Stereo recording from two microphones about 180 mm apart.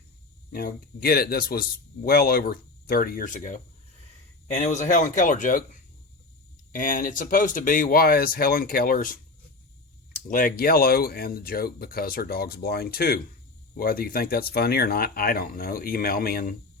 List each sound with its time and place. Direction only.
0.5 s speech: 55° left (ahead or behind)
6.7 s speech: 50° left (ahead or behind)
10.1 s speech: 50° left (ahead or behind)